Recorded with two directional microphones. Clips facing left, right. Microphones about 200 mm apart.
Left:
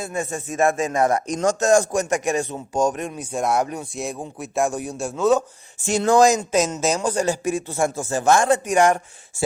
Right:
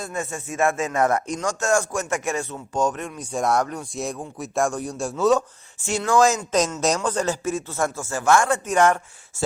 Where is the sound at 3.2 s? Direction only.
Centre (ahead or behind).